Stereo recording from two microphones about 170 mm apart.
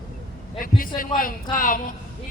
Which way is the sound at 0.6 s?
55° left (ahead or behind).